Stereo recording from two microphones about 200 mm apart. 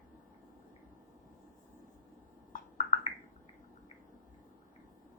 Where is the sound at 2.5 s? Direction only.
40° left (ahead or behind).